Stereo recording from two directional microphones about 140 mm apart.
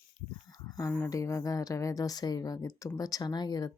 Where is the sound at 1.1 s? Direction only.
20° left (ahead or behind).